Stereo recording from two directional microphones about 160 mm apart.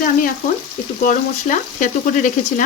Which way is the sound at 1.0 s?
50° left (ahead or behind).